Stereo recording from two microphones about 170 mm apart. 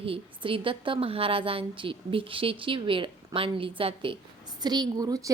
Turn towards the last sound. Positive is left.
turn(degrees=-20)  # may be behind; listen again after turning